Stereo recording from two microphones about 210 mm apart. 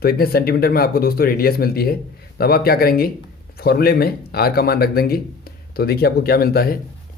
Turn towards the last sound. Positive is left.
turn(degrees=45)  # may be behind; listen again after turning